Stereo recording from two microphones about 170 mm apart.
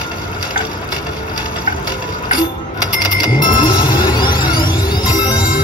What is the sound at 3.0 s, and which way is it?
Music, 25° left (ahead or behind).